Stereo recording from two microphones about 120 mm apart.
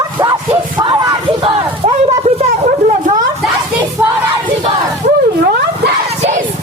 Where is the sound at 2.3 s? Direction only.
90° right.